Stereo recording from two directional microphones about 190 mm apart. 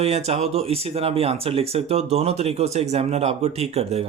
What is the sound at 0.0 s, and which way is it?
Speech, 35° right (ahead or behind).